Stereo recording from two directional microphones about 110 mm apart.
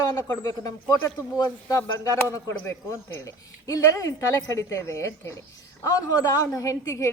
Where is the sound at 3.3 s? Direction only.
30° left (ahead or behind).